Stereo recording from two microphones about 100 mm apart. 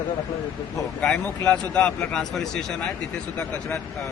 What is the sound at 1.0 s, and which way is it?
Speech, 10° left (ahead or behind).